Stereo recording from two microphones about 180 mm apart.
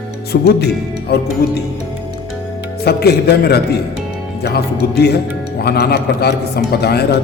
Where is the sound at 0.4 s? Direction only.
60° left (ahead or behind).